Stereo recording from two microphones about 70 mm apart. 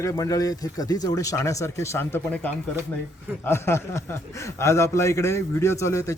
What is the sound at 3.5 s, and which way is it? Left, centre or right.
A man's voice, left.